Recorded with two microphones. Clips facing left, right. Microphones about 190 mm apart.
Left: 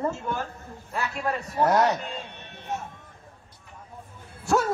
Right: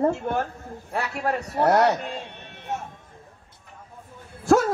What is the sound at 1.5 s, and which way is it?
Speech, 40° right (ahead or behind).